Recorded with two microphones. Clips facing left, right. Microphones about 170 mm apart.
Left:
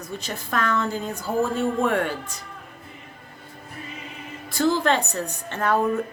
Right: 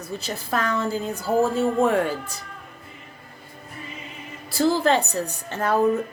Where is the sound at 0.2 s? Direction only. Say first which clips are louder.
Even; 35° right (ahead or behind).